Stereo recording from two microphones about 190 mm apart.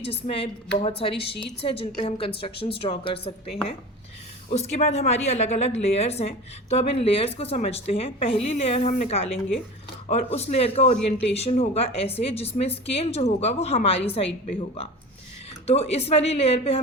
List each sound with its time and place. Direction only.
0.0 s a woman's voice: 30° left (ahead or behind)
4.4 s a woman's voice: 35° left (ahead or behind)
15.6 s a woman's voice: 35° left (ahead or behind)